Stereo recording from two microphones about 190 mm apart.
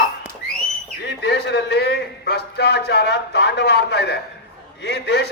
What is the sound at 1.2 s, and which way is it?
A man's voice, 60° left (ahead or behind).